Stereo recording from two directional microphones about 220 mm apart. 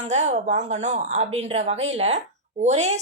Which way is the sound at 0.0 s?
30° right (ahead or behind).